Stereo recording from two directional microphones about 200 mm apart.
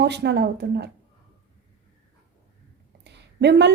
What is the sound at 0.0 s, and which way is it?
Speech, 60° right (ahead or behind).